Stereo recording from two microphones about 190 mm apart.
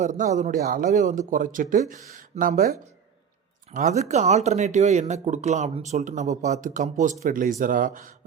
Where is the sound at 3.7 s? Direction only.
40° right (ahead or behind).